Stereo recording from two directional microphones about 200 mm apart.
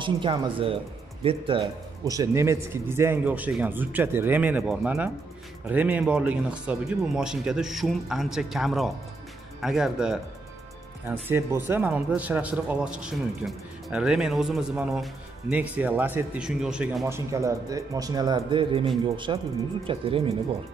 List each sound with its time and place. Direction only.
0.0 s speech: 25° right (ahead or behind)
2.0 s speech: 15° right (ahead or behind)
17.3 s speech: 15° right (ahead or behind)